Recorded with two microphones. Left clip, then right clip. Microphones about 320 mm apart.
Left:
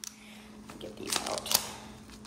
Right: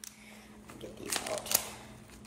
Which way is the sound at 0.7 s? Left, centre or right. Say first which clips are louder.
Left 3 dB; centre.